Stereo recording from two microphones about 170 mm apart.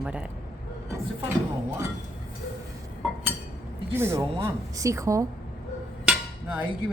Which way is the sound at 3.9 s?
15° right (ahead or behind).